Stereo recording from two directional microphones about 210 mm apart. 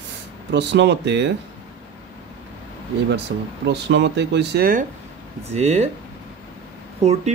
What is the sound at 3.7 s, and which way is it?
Speech, 55° right (ahead or behind).